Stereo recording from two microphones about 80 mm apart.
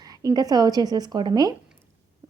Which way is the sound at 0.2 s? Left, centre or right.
Right.